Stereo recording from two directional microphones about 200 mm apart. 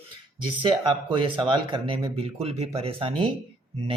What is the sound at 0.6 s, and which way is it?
Speech, 25° right (ahead or behind).